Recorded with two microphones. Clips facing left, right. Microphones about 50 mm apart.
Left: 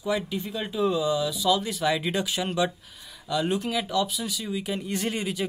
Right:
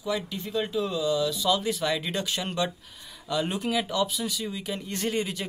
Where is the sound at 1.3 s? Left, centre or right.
Centre.